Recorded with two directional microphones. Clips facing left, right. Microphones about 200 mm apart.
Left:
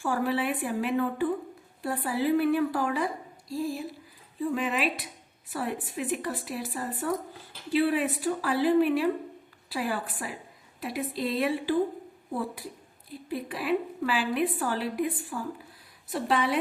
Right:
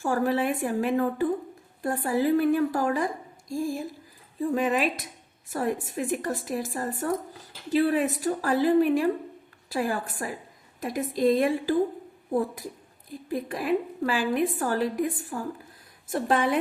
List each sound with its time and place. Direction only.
0.0 s a woman's voice: 45° right (ahead or behind)